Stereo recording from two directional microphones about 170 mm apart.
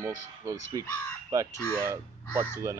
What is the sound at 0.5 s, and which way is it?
Speech, 15° right (ahead or behind).